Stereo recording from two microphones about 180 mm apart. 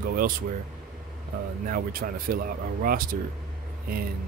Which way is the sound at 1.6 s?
50° right (ahead or behind).